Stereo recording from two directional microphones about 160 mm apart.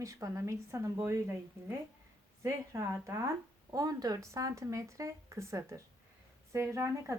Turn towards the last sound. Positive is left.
turn(degrees=-15)  # may be behind; listen again after turning